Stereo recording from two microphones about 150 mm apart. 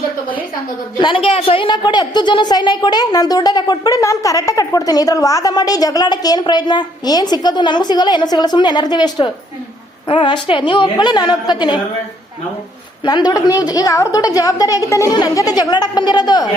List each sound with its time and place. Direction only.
0.9 s a woman's voice: 35° left (ahead or behind)
13.1 s a woman's voice: 30° left (ahead or behind)